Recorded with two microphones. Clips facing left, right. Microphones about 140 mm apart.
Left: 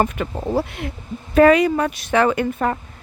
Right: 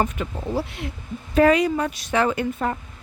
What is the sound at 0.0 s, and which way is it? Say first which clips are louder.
Speech: left 4 dB; 55° left (ahead or behind).